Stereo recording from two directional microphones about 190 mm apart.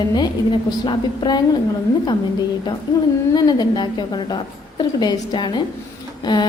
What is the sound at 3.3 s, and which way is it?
A woman's voice, 20° left (ahead or behind).